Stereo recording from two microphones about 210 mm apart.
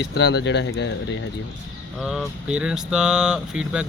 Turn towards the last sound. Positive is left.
turn(degrees=-5)  # may be behind; listen again after turning